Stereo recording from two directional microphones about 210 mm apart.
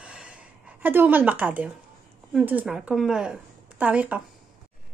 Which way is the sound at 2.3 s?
5° right (ahead or behind).